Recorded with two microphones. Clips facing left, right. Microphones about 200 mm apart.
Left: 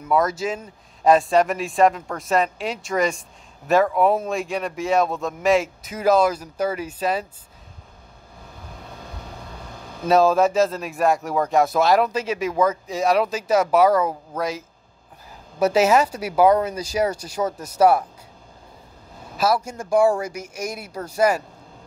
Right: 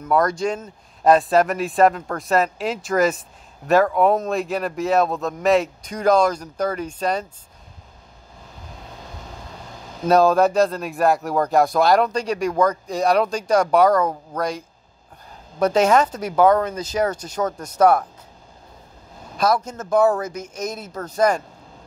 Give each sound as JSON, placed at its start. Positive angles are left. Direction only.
{"t": 0.0, "sound": "speech", "side_deg": 5}
{"t": 10.0, "sound": "speech", "side_deg": 0}
{"t": 15.6, "sound": "speech", "side_deg": 5}
{"t": 19.3, "sound": "speech", "side_deg": 5}